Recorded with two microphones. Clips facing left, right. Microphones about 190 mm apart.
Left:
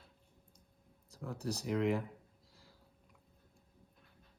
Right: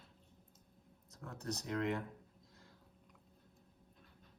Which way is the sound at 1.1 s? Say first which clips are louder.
Left 4 dB; 30° left (ahead or behind).